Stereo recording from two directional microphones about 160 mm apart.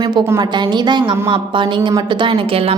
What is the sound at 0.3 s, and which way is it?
A woman's voice, 30° right (ahead or behind).